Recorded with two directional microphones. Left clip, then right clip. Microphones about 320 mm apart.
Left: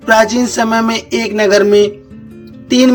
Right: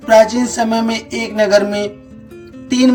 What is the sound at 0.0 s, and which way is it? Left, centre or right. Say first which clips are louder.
Speech: even; centre.